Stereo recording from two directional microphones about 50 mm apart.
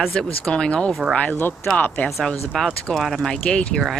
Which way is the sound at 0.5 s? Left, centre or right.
Centre.